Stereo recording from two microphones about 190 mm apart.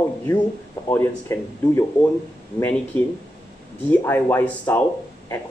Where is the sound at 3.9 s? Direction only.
10° left (ahead or behind).